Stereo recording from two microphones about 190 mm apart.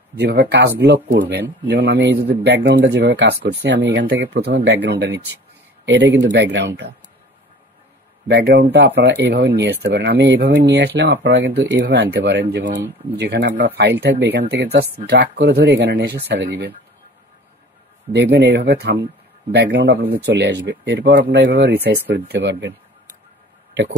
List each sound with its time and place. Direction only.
0.2 s speech: 60° right (ahead or behind)
8.3 s speech: 60° right (ahead or behind)
18.1 s speech: 65° right (ahead or behind)